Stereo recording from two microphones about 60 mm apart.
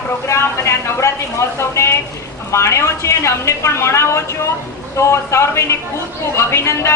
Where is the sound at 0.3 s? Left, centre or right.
Left.